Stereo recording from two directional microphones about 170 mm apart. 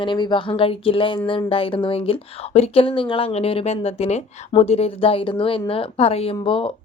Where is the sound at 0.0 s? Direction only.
25° left (ahead or behind).